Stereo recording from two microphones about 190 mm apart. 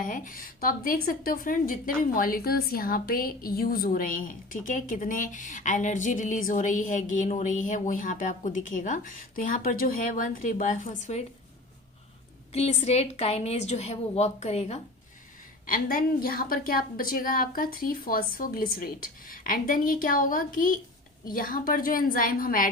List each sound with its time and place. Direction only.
0.0 s a woman's voice: 45° left (ahead or behind)
12.5 s a woman's voice: 35° left (ahead or behind)
15.6 s a woman's voice: 45° left (ahead or behind)